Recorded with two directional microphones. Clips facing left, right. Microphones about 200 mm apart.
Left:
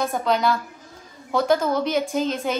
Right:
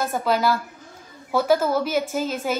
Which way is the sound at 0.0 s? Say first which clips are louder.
Even; 5° right (ahead or behind).